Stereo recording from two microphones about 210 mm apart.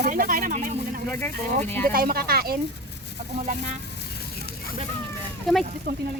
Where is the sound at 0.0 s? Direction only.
40° right (ahead or behind).